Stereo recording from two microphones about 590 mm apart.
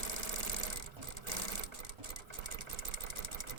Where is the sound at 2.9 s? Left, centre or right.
Right.